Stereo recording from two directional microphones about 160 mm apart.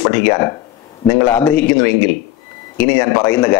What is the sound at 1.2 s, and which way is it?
Speech, 10° left (ahead or behind).